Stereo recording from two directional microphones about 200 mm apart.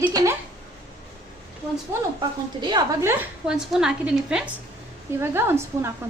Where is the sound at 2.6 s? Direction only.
15° right (ahead or behind).